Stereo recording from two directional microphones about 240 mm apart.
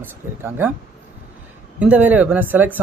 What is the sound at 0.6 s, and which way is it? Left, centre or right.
Speech, centre.